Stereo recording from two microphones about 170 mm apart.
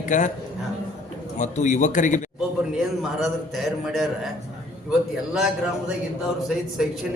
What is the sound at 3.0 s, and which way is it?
A man's voice, centre (ahead or behind).